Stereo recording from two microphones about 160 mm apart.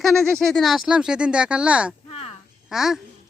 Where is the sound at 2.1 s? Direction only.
40° left (ahead or behind).